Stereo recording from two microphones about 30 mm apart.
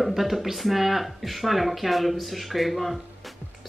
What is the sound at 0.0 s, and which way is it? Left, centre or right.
Speech, centre.